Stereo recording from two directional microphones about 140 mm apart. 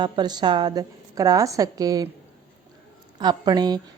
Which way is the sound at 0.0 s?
30° right (ahead or behind).